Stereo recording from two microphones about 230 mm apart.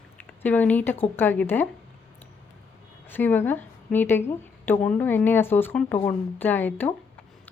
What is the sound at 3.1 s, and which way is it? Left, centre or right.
A woman's voice, centre.